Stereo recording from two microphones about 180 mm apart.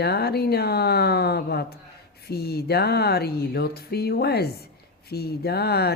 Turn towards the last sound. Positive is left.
turn(degrees=65)  # may be behind; listen again after turning